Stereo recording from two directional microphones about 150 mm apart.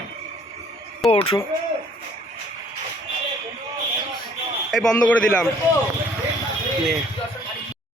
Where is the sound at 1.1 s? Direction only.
40° left (ahead or behind).